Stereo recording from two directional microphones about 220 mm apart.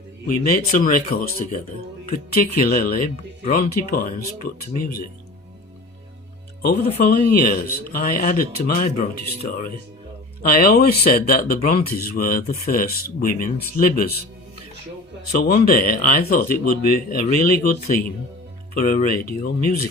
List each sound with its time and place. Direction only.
0.3 s speech: 40° left (ahead or behind)
2.6 s speech: 40° left (ahead or behind)
6.9 s speech: 40° left (ahead or behind)
15.3 s speech: 40° left (ahead or behind)